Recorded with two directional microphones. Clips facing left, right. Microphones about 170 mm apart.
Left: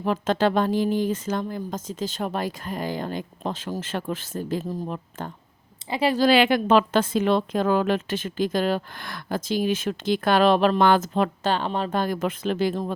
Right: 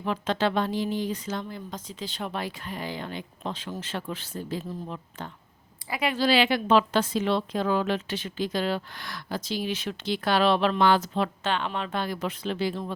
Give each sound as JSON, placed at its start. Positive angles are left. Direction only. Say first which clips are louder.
{"t": 0.0, "sound": "a woman's voice", "louder": "left 4 dB", "side_deg": 45}
{"t": 5.9, "sound": "speech", "louder": "left 6 dB", "side_deg": 35}
{"t": 6.2, "sound": "a woman's voice", "louder": "left 3 dB", "side_deg": 50}